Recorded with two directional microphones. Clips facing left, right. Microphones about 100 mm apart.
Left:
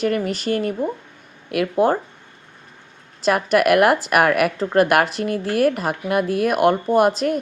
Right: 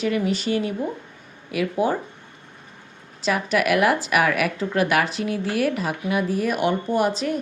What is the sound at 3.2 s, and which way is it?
A woman's voice, 50° left (ahead or behind).